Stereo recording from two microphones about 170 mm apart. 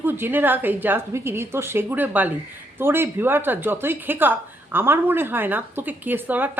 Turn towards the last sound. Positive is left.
turn(degrees=-10)  # may be behind; listen again after turning